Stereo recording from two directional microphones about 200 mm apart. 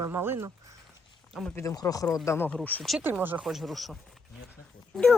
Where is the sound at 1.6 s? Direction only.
15° left (ahead or behind).